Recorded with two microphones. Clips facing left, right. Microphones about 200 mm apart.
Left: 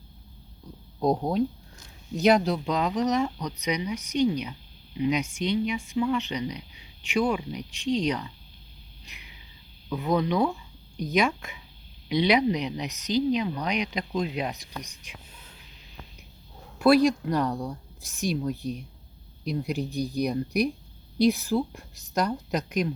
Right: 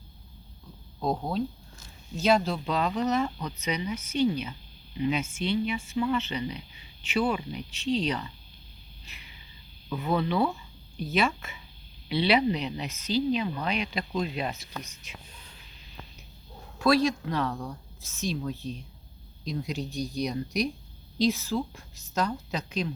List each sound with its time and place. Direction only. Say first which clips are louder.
0.9 s speech: left 5 dB; 15° left (ahead or behind)
9.0 s a sound: left 1 dB; 15° left (ahead or behind)
10.0 s speech: left 2 dB; 15° left (ahead or behind)
16.8 s speech: left 4 dB; 10° left (ahead or behind)